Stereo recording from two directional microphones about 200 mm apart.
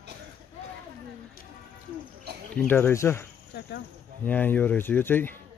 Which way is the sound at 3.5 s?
55° left (ahead or behind).